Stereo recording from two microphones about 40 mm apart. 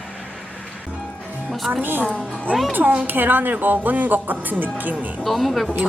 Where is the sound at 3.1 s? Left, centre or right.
Right.